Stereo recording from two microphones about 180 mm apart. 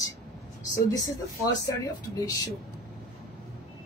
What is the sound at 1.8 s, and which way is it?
Speech, 20° left (ahead or behind).